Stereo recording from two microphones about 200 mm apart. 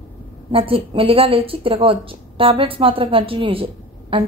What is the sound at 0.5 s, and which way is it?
A woman's voice, 30° right (ahead or behind).